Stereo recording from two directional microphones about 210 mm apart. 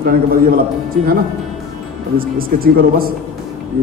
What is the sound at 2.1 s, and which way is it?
Speech, 45° right (ahead or behind).